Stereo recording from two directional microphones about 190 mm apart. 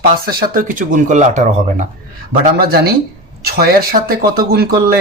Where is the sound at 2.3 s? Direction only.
50° right (ahead or behind).